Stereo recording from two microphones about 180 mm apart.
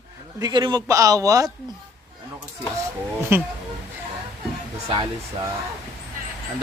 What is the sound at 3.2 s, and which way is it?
Speech, 10° right (ahead or behind).